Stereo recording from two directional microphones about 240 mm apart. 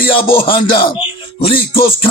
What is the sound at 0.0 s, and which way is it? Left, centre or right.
Music, left.